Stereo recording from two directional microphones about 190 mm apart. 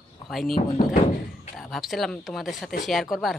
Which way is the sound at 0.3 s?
Centre (ahead or behind).